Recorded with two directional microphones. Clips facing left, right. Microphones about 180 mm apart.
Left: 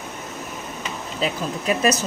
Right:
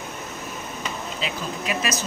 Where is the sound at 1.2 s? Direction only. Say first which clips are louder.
Left 5 dB; 40° left (ahead or behind).